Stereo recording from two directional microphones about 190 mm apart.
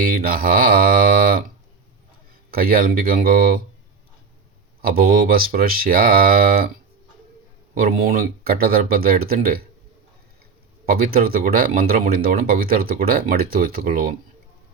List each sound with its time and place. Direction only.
0.0 s speech: 50° right (ahead or behind)
2.5 s speech: 50° right (ahead or behind)
4.8 s speech: 50° right (ahead or behind)
7.8 s speech: 50° right (ahead or behind)
10.8 s speech: 50° right (ahead or behind)